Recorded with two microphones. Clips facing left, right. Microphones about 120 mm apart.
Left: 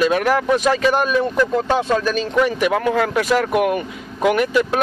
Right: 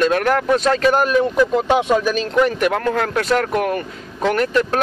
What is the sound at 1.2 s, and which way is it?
Speech, 15° right (ahead or behind).